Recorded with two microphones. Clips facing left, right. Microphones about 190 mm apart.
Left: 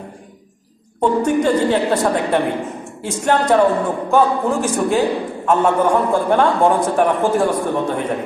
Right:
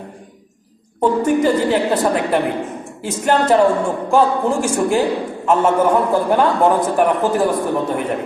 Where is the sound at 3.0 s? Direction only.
Centre (ahead or behind).